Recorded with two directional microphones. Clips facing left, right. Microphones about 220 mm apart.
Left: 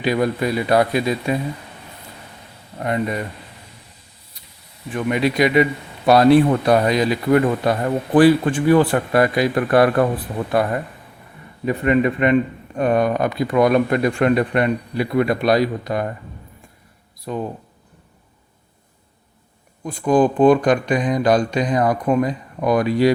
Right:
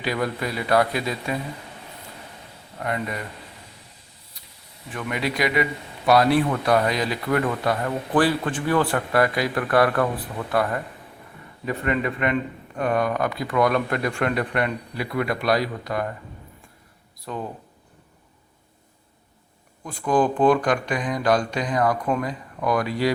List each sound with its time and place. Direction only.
0.0 s a man's voice: 20° left (ahead or behind)
2.7 s a man's voice: 25° left (ahead or behind)
4.9 s a man's voice: 20° left (ahead or behind)
17.3 s speech: 15° left (ahead or behind)
19.8 s speech: 15° left (ahead or behind)